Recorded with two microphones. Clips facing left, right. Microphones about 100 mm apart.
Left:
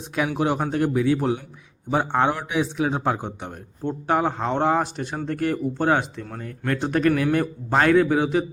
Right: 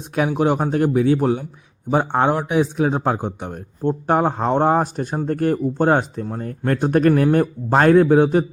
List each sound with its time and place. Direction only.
0.2 s a man's voice: 50° right (ahead or behind)